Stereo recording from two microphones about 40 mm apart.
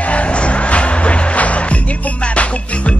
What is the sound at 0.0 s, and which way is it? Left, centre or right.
Music, left.